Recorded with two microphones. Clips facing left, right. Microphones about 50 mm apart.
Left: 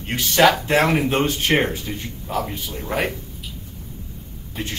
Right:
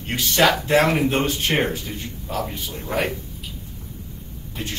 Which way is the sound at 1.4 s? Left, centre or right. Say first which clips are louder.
Left 2 dB; left.